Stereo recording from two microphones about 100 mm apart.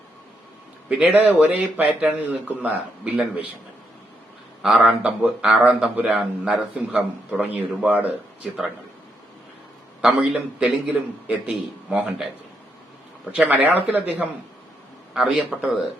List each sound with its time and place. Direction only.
0.9 s a man's voice: 15° right (ahead or behind)
4.6 s a man's voice: 10° right (ahead or behind)
10.0 s a man's voice: 10° right (ahead or behind)
13.3 s a man's voice: 15° right (ahead or behind)
15.1 s a man's voice: 5° right (ahead or behind)